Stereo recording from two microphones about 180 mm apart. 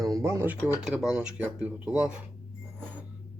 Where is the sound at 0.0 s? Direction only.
20° right (ahead or behind).